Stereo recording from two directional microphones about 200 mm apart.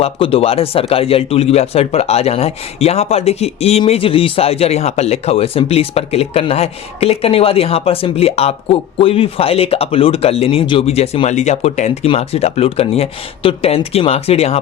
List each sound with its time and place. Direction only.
0.0 s speech: 30° left (ahead or behind)